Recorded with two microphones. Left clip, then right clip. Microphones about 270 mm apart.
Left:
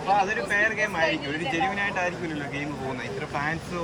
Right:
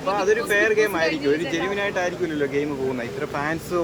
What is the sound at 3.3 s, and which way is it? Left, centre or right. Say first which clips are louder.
Speech: right 2 dB; centre.